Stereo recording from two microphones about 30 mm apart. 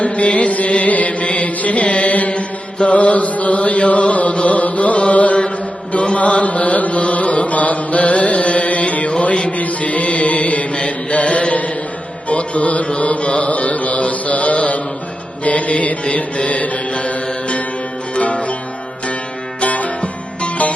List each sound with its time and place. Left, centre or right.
0.0 s music: left
2.3 s chant: left
4.4 s music: left
9.6 s music: left
10.8 s mantra: left
12.3 s music: left
13.0 s mantra: left
18.2 s music: left
19.6 s music: left